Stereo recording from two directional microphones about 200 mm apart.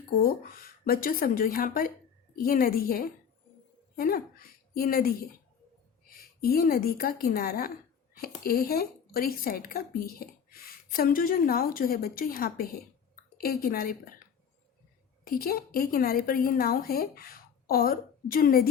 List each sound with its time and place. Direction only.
0.2 s a woman's voice: 45° left (ahead or behind)
15.3 s a woman's voice: 45° left (ahead or behind)